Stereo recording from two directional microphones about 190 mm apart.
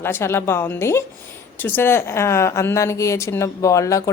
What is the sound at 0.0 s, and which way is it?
A woman's voice, 15° left (ahead or behind).